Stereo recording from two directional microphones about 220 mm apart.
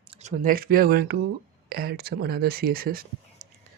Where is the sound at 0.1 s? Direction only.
30° right (ahead or behind).